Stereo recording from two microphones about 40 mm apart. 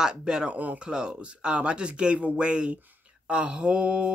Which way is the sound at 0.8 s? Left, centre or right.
Right.